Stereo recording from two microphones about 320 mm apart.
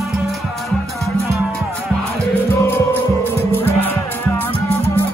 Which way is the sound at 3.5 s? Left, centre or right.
Centre.